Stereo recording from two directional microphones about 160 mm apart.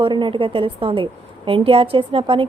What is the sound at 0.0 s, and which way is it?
A woman's voice, 30° right (ahead or behind).